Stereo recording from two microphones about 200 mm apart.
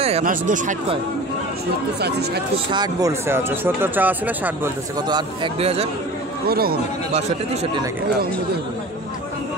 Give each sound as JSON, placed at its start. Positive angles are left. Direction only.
{"t": 0.2, "sound": "speech", "side_deg": -40}
{"t": 2.0, "sound": "speech", "side_deg": -55}
{"t": 2.7, "sound": "speech", "side_deg": -20}
{"t": 5.0, "sound": "speech", "side_deg": -25}
{"t": 6.4, "sound": "speech", "side_deg": -50}